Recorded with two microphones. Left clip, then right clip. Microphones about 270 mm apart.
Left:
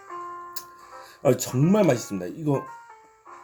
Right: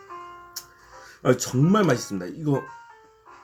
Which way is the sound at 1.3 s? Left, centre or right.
Centre.